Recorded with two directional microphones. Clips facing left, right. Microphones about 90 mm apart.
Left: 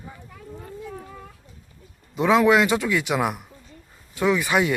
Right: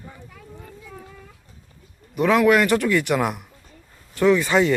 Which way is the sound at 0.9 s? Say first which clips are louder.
Left 3 dB; 25° left (ahead or behind).